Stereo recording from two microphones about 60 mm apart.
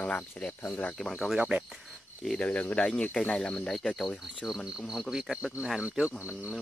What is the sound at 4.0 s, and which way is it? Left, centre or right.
Cricket, centre.